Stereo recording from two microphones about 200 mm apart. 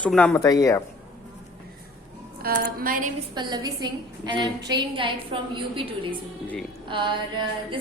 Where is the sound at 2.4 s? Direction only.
50° right (ahead or behind).